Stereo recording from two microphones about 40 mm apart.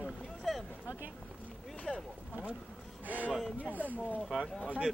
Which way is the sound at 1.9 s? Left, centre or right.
Left.